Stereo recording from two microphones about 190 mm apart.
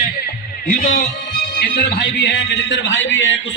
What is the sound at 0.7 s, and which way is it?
A man's voice, 45° left (ahead or behind).